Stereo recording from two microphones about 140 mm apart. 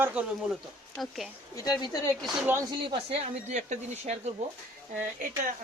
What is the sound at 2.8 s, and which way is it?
Speech, 40° right (ahead or behind).